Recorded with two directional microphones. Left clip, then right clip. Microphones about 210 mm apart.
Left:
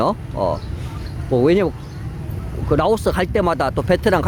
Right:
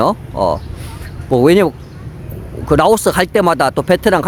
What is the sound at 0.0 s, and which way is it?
Speech, 20° right (ahead or behind).